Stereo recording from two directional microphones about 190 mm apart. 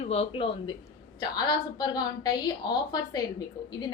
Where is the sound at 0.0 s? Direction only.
35° left (ahead or behind).